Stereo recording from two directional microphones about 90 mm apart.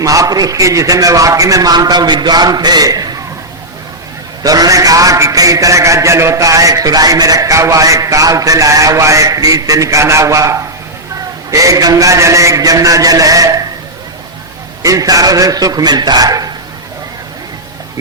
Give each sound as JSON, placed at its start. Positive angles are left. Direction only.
{"t": 0.0, "sound": "a man's voice", "side_deg": -40}
{"t": 4.4, "sound": "a man's voice", "side_deg": -45}
{"t": 14.8, "sound": "a man's voice", "side_deg": -40}